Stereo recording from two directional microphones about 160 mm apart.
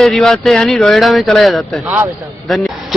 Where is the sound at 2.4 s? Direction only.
Centre (ahead or behind).